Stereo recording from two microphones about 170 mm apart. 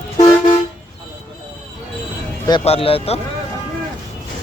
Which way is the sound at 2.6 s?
35° left (ahead or behind).